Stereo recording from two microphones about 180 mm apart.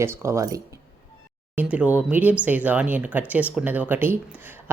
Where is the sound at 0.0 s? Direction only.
15° right (ahead or behind).